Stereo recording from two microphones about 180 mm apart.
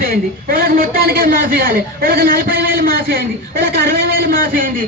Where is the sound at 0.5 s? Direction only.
55° right (ahead or behind).